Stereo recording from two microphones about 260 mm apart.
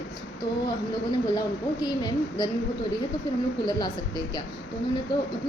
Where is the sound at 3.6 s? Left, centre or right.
Centre.